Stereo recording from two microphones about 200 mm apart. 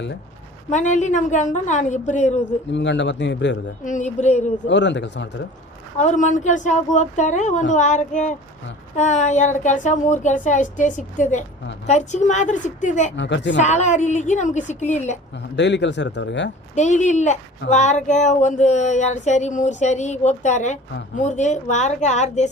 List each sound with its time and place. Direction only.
0.7 s speech: 35° left (ahead or behind)
2.7 s speech: 65° left (ahead or behind)
3.8 s speech: 35° left (ahead or behind)
4.6 s speech: 60° left (ahead or behind)
6.0 s speech: 35° left (ahead or behind)
13.1 s speech: 60° left (ahead or behind)
13.6 s speech: 35° left (ahead or behind)
15.5 s speech: 60° left (ahead or behind)
16.7 s speech: 35° left (ahead or behind)